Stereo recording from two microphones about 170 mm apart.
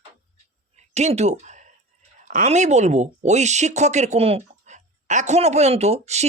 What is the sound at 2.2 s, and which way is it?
Speech, 45° right (ahead or behind).